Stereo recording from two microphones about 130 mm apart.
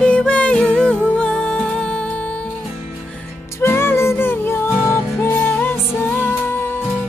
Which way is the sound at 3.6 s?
20° left (ahead or behind).